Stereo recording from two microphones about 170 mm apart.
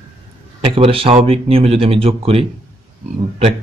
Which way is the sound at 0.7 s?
35° right (ahead or behind).